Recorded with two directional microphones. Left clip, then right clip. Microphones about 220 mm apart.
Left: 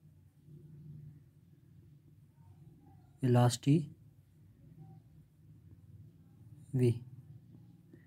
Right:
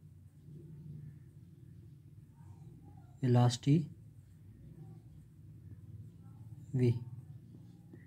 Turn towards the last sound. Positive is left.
turn(degrees=25)  # may be behind; listen again after turning